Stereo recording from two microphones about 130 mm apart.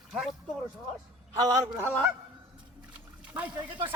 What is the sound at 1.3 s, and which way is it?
Speech, 30° right (ahead or behind).